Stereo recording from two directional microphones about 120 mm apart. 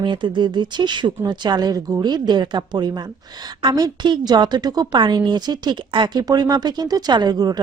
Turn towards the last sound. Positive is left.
turn(degrees=-35)  # may be behind; listen again after turning